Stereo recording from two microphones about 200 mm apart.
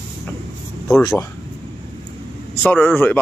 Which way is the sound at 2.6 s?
5° left (ahead or behind).